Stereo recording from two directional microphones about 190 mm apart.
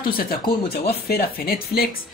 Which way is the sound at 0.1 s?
50° left (ahead or behind).